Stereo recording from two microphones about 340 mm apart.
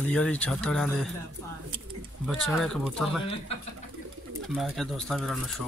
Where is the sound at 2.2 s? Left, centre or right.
Centre.